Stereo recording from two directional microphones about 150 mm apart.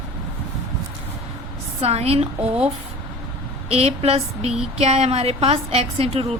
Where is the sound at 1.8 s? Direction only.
45° right (ahead or behind).